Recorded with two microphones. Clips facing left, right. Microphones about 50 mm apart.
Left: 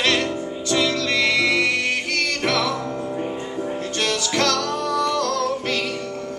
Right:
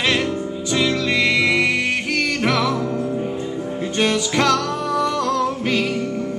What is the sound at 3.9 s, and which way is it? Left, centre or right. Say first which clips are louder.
Music: right 4 dB; centre.